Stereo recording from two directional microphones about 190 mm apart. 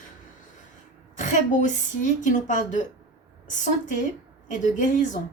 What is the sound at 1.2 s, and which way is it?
Speech, 40° left (ahead or behind).